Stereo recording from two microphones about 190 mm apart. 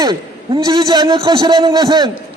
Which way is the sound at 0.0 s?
20° right (ahead or behind).